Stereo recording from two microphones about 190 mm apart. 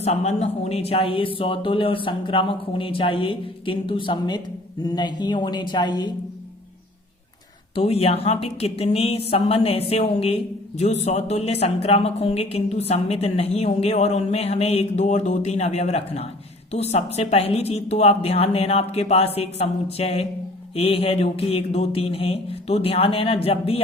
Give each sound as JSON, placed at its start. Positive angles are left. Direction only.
{"t": 0.0, "sound": "speech", "side_deg": 35}
{"t": 7.8, "sound": "a woman's voice", "side_deg": 30}